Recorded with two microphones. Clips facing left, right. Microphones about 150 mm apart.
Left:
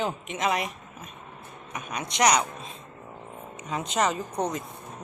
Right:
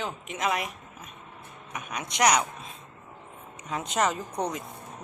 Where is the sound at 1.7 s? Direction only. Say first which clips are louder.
Left 2 dB; 5° right (ahead or behind).